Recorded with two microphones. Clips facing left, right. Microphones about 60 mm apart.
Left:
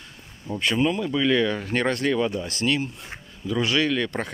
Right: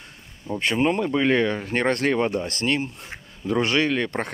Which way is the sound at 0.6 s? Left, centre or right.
Right.